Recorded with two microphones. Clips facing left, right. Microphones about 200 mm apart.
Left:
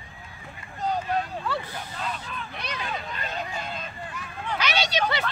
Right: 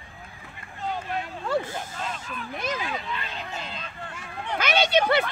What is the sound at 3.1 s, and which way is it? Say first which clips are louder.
Hubbub: left 1 dB; 45° left (ahead or behind).